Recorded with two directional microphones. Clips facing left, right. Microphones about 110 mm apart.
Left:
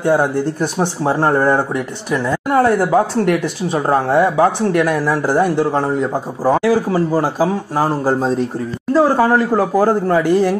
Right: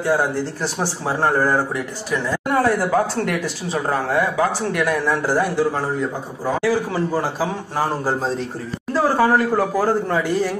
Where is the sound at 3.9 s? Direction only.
25° left (ahead or behind).